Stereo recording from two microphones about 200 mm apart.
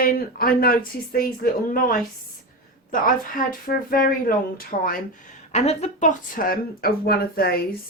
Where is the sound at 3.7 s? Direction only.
45° left (ahead or behind).